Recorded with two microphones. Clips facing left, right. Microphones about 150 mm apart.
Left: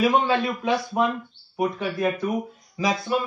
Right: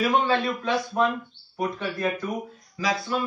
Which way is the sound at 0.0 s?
Centre (ahead or behind).